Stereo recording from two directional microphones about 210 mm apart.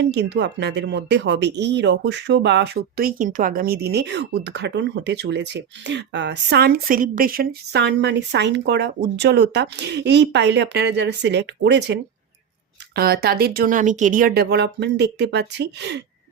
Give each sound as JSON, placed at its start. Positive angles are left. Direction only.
{"t": 0.1, "sound": "speech", "side_deg": -55}
{"t": 13.0, "sound": "speech", "side_deg": -45}